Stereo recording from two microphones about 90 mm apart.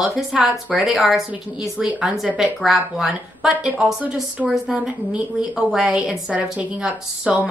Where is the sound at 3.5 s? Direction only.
15° right (ahead or behind).